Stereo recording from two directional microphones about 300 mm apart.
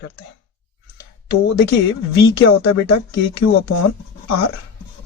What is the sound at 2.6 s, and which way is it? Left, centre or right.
Speech, left.